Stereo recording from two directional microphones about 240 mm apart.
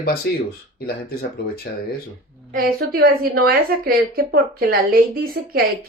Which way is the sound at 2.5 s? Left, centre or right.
Right.